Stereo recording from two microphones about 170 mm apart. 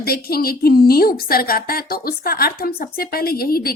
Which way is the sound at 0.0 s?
65° left (ahead or behind).